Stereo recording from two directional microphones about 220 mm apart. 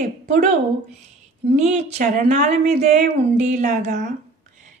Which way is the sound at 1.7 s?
35° right (ahead or behind).